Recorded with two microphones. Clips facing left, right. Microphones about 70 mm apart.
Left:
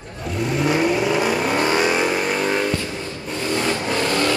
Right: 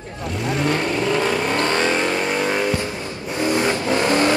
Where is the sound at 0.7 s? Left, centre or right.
Centre.